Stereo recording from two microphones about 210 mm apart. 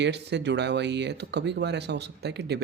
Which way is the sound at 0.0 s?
55° right (ahead or behind).